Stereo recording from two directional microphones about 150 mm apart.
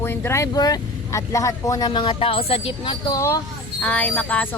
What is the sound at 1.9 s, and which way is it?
Speech, 35° left (ahead or behind).